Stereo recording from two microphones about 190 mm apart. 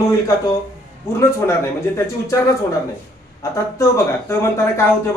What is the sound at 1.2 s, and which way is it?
Speech, 15° left (ahead or behind).